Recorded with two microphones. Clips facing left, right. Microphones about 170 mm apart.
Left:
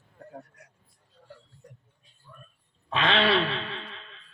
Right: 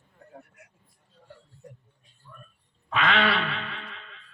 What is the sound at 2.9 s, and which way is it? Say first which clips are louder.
Speech: left 1 dB; 30° left (ahead or behind).